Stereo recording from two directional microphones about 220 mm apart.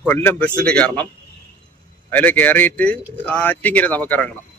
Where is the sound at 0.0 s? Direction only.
10° left (ahead or behind).